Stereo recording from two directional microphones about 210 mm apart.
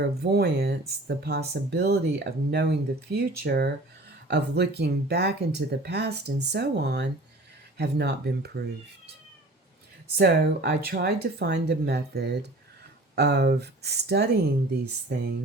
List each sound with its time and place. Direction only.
0.0 s speech: 50° right (ahead or behind)
10.2 s speech: 50° right (ahead or behind)